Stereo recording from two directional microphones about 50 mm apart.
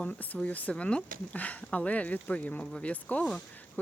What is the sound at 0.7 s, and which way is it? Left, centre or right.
Speech, centre.